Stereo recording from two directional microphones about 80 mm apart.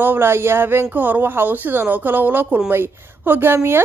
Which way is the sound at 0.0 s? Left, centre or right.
Right.